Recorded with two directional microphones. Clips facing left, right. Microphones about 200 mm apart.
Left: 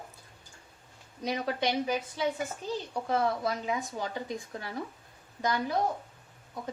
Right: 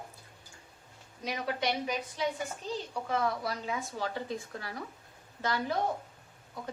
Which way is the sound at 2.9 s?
35° left (ahead or behind).